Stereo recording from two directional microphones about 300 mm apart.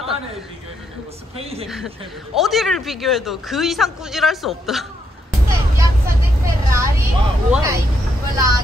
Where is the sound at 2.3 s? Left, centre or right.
Centre.